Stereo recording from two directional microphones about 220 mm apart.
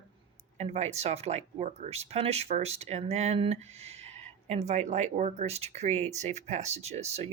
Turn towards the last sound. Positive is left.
turn(degrees=-30)  # may be behind; listen again after turning